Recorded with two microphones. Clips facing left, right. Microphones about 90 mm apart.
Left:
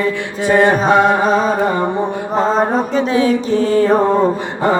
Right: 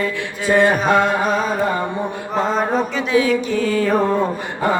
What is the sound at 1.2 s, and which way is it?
Mantra, 40° left (ahead or behind).